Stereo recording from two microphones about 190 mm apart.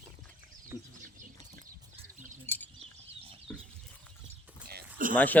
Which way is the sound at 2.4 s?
10° left (ahead or behind).